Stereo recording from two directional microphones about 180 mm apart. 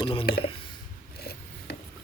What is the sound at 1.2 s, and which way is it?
Wood, 60° left (ahead or behind).